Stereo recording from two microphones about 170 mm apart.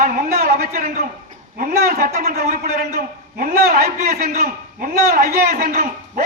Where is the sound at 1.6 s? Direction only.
60° right (ahead or behind).